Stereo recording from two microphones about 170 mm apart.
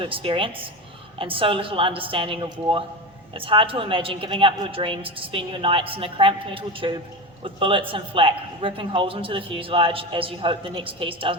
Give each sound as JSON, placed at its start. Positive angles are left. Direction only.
{"t": 0.0, "sound": "a man's voice", "side_deg": -30}